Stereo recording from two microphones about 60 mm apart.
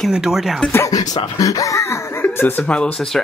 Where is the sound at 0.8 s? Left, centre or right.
Left.